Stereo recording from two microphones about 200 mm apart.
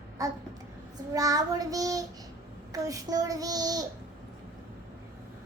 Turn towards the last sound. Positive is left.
turn(degrees=-20)  # may be behind; listen again after turning